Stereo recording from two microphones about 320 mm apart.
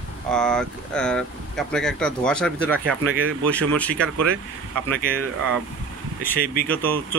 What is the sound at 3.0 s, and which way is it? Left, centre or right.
Speech, right.